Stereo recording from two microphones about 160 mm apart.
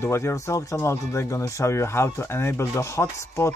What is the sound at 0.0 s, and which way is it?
Speech, 15° left (ahead or behind).